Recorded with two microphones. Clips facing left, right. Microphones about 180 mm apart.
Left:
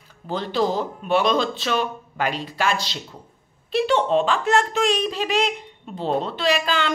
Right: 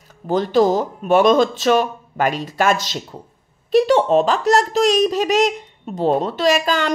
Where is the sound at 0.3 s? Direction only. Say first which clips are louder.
Right 7 dB; 45° right (ahead or behind).